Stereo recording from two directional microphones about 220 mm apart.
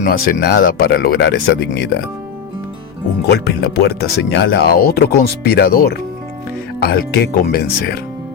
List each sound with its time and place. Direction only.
0.0 s speech: 40° left (ahead or behind)
3.2 s speech: 50° left (ahead or behind)